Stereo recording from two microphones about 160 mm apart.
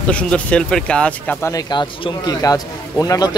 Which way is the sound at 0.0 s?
5° left (ahead or behind).